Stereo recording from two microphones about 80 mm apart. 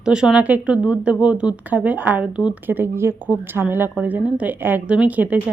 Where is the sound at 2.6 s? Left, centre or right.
Right.